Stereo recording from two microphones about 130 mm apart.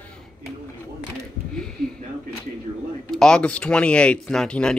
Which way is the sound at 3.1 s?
5° left (ahead or behind).